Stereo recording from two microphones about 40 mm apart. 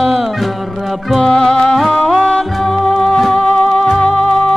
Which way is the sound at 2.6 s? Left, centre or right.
Centre.